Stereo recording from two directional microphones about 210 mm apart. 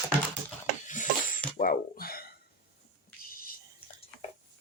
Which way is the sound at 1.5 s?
40° left (ahead or behind).